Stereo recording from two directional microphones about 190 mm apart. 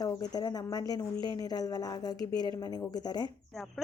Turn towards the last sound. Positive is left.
turn(degrees=20)  # may be behind; listen again after turning